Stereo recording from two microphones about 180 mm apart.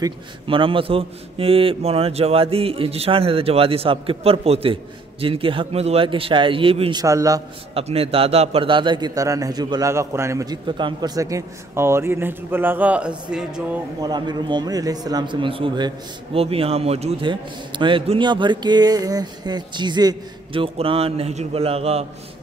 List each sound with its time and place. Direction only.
0.0 s a man's voice: 30° right (ahead or behind)
7.7 s a man's voice: 30° right (ahead or behind); by 13.6 s 5° right (ahead or behind)
14.0 s a man's voice: 25° right (ahead or behind)